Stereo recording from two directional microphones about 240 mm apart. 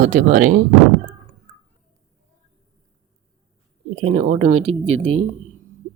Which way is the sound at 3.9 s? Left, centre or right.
Right.